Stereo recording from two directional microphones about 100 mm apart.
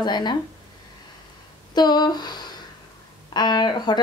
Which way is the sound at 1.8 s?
45° left (ahead or behind).